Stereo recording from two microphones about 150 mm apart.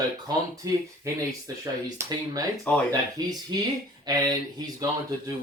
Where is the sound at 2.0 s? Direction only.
25° right (ahead or behind).